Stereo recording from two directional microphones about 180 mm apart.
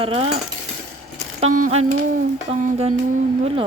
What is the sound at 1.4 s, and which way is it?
Speech, 35° right (ahead or behind).